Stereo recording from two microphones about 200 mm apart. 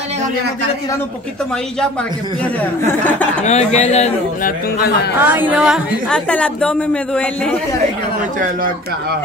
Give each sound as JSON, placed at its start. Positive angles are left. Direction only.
{"t": 2.9, "sound": "speech", "side_deg": 10}
{"t": 3.4, "sound": "a man's voice", "side_deg": 35}
{"t": 5.2, "sound": "a woman's voice", "side_deg": -10}
{"t": 8.2, "sound": "a man's voice", "side_deg": -40}